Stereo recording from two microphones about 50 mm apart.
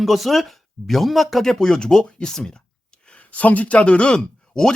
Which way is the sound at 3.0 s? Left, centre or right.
Left.